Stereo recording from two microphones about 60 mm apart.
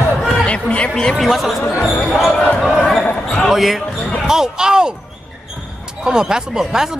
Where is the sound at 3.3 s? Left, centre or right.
Centre.